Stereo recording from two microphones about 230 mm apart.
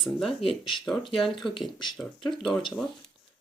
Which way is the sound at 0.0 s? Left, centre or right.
Centre.